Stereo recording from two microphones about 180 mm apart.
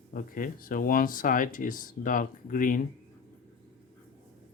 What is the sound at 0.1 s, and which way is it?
Speech, 50° left (ahead or behind).